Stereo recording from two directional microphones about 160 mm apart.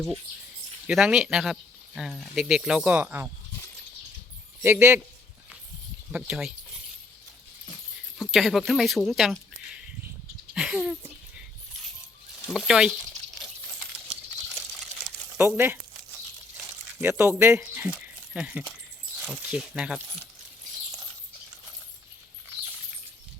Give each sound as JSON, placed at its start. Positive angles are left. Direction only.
{"t": 0.9, "sound": "speech", "side_deg": 0}
{"t": 4.6, "sound": "speech", "side_deg": -15}
{"t": 6.1, "sound": "speech", "side_deg": -5}
{"t": 8.2, "sound": "speech", "side_deg": 0}
{"t": 10.5, "sound": "speech", "side_deg": -5}
{"t": 12.5, "sound": "speech", "side_deg": 0}
{"t": 15.4, "sound": "speech", "side_deg": -15}
{"t": 17.0, "sound": "speech", "side_deg": -15}